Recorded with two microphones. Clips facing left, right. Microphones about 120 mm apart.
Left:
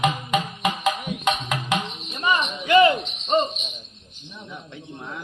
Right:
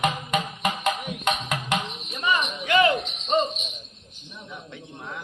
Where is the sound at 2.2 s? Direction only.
5° right (ahead or behind).